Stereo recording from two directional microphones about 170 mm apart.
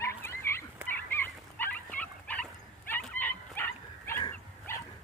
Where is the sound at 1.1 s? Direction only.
10° left (ahead or behind).